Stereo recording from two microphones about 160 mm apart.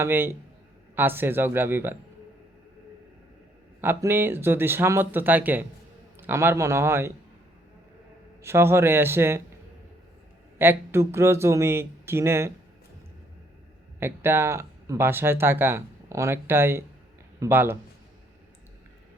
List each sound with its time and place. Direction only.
0.0 s speech: 15° right (ahead or behind)
3.8 s speech: 15° right (ahead or behind)
8.4 s speech: 15° right (ahead or behind)
10.6 s speech: 15° right (ahead or behind)
14.0 s speech: 15° right (ahead or behind)